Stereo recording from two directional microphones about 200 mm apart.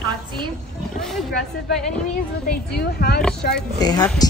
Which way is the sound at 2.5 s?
50° left (ahead or behind).